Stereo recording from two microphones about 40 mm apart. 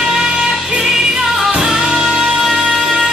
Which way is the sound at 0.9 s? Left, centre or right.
Centre.